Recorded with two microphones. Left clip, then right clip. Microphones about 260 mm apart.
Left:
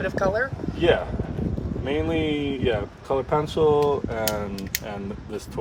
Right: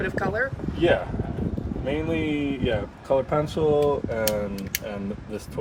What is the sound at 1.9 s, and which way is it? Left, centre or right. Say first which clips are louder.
Speech: left 2 dB; centre.